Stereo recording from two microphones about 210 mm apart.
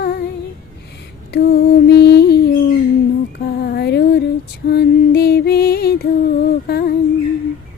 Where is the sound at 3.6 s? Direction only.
50° left (ahead or behind).